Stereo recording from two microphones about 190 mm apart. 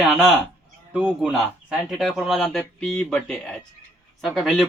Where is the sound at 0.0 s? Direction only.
Centre (ahead or behind).